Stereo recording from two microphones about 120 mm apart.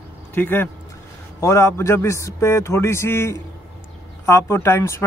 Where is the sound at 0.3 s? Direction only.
15° left (ahead or behind).